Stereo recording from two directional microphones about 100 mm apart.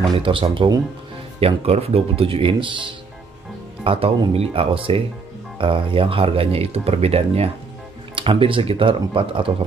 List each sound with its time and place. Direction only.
0.2 s speech: 60° right (ahead or behind)
1.4 s speech: 90° right; by 2.9 s 55° right (ahead or behind)
3.8 s speech: 65° right (ahead or behind); by 7.5 s 90° right
8.2 s speech: 60° right (ahead or behind)